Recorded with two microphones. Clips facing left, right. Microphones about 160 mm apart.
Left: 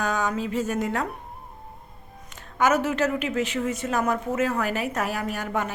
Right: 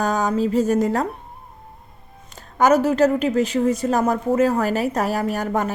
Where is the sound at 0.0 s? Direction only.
40° right (ahead or behind).